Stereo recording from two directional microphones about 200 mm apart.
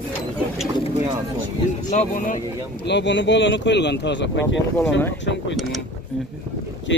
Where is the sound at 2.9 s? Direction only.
65° left (ahead or behind).